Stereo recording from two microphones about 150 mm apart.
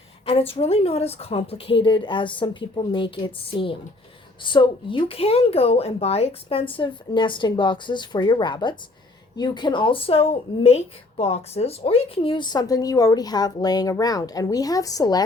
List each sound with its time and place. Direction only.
0.3 s a woman's voice: 40° left (ahead or behind); by 15.2 s 25° left (ahead or behind)